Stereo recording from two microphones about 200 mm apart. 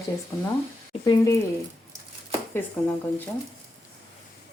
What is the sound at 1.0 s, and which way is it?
Speech, 20° left (ahead or behind).